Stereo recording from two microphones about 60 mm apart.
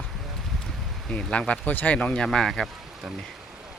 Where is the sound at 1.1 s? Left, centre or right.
Centre.